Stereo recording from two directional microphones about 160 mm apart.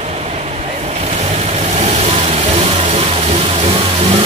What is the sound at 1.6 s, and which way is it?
Vehicle, 45° right (ahead or behind).